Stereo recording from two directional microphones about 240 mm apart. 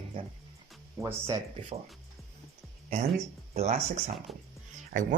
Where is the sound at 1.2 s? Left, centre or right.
Centre.